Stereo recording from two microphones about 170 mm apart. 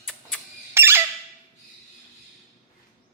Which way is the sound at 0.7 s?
15° right (ahead or behind).